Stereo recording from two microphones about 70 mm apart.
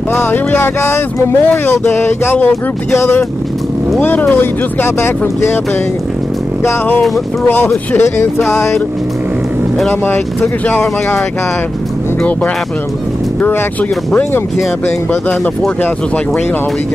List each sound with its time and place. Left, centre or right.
0.1 s speech: left
4.0 s speech: left
7.4 s speech: left
10.7 s speech: left